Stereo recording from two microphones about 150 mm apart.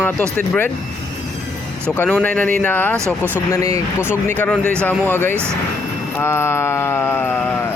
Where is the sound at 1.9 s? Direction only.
10° left (ahead or behind).